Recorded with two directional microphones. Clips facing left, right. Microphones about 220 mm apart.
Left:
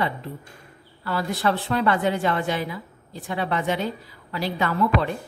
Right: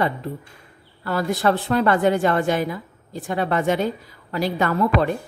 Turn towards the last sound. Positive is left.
turn(degrees=-45)  # may be behind; listen again after turning